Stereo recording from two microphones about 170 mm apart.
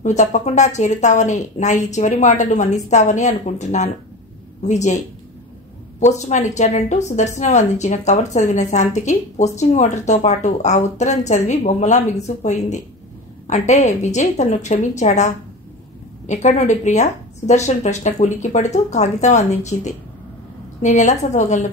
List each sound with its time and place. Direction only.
0.0 s a woman's voice: 45° left (ahead or behind)